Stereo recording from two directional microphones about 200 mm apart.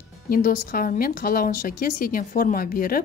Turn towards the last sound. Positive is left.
turn(degrees=45)  # may be behind; listen again after turning